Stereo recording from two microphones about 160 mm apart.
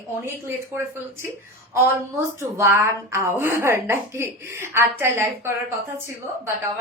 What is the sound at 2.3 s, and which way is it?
A woman's voice, 15° right (ahead or behind).